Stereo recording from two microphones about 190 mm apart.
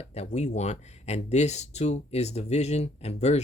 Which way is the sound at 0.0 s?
35° left (ahead or behind).